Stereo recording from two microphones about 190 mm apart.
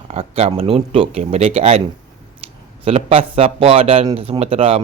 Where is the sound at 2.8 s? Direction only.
30° right (ahead or behind).